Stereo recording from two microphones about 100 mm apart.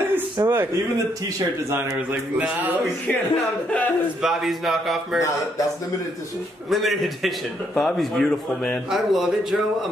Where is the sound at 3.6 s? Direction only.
15° left (ahead or behind).